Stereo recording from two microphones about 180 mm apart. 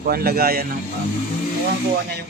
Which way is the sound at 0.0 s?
55° right (ahead or behind).